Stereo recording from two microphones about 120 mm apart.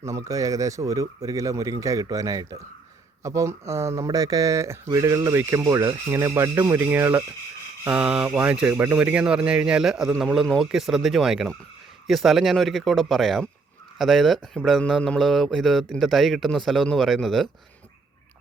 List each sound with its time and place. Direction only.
0.0 s speech: 25° right (ahead or behind); by 17.5 s centre (ahead or behind)